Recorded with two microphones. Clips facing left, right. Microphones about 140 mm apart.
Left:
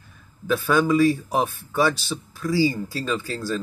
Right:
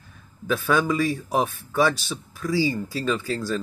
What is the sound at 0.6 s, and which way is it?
Speech, centre (ahead or behind).